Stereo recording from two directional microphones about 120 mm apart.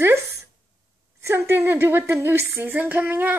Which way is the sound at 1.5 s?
20° right (ahead or behind).